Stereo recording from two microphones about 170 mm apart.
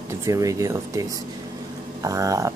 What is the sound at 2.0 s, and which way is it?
Speech, 20° right (ahead or behind).